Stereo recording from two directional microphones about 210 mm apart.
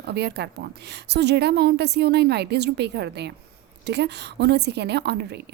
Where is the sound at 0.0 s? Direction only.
50° right (ahead or behind).